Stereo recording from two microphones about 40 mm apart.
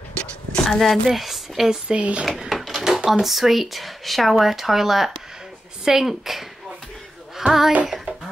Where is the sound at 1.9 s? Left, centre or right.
Right.